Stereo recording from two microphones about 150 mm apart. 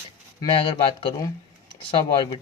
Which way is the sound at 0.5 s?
35° left (ahead or behind).